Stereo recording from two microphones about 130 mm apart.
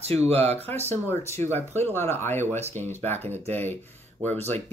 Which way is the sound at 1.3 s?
20° left (ahead or behind).